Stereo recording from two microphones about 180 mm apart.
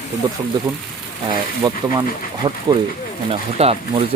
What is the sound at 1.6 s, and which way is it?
Speech, 25° right (ahead or behind).